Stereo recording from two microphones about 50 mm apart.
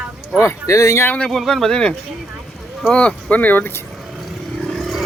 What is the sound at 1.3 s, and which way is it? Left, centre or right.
Speech, centre.